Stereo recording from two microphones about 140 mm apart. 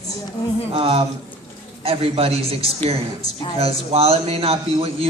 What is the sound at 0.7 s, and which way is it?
A man's voice, 45° right (ahead or behind).